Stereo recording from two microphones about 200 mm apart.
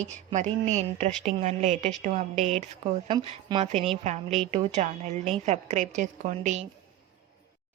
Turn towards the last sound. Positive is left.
turn(degrees=-35)  # may be behind; listen again after turning